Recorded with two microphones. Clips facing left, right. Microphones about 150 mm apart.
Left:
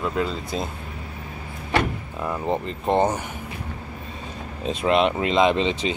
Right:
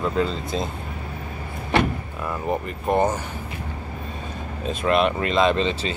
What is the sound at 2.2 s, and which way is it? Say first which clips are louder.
Speech: left 1 dB; 20° left (ahead or behind).